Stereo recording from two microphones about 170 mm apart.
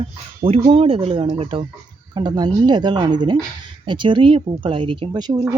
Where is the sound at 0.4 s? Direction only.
35° right (ahead or behind).